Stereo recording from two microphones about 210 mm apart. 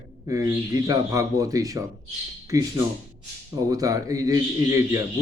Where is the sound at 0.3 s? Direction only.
15° right (ahead or behind).